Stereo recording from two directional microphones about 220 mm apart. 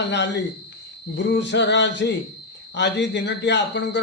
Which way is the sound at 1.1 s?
55° left (ahead or behind).